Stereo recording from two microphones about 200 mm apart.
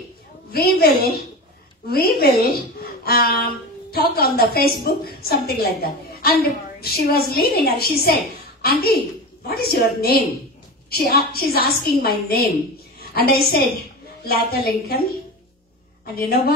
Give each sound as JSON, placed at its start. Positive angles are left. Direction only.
{"t": 0.5, "sound": "a woman's voice", "side_deg": 50}
{"t": 16.2, "sound": "a woman's voice", "side_deg": 50}